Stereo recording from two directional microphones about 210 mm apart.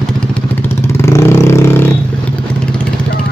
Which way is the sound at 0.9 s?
10° left (ahead or behind).